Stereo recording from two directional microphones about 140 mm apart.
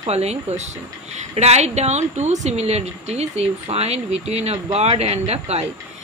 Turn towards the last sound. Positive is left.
turn(degrees=-50)  # may be behind; listen again after turning